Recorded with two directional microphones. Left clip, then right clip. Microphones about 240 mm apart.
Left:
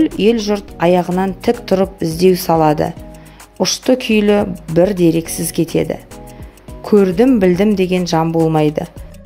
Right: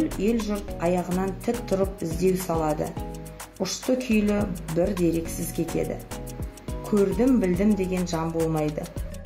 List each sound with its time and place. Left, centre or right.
0.2 s a woman's voice: left
6.9 s a woman's voice: left